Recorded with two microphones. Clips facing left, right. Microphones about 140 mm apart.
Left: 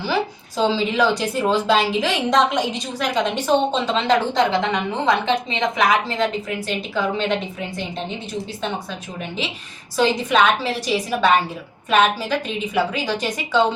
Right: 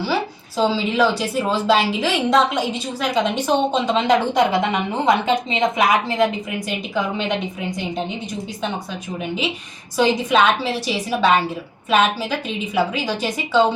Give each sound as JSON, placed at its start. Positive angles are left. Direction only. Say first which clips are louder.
{"t": 0.1, "sound": "a woman's voice", "louder": "even", "side_deg": -10}
{"t": 10.0, "sound": "a woman's voice", "louder": "right 1 dB", "side_deg": -10}
{"t": 11.9, "sound": "a woman's voice", "louder": "even", "side_deg": -5}